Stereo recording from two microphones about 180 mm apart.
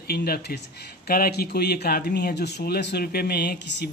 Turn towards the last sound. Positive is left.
turn(degrees=60)  # may be behind; listen again after turning